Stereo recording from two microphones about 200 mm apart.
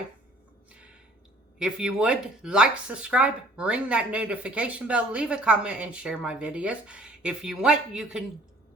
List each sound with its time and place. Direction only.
1.5 s speech: 5° right (ahead or behind)